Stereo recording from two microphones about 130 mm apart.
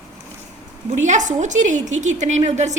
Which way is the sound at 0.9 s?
65° right (ahead or behind).